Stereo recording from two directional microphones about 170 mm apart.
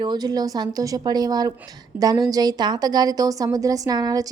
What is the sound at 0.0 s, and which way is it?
A woman's voice, 25° right (ahead or behind).